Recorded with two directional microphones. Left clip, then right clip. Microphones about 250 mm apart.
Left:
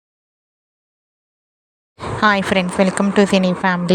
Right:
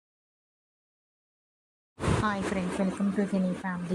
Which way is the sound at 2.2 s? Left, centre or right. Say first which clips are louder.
Left 15 dB; left.